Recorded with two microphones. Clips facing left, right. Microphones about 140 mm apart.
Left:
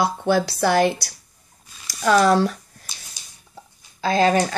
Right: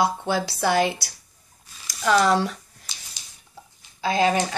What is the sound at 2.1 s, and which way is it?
Speech, 45° left (ahead or behind).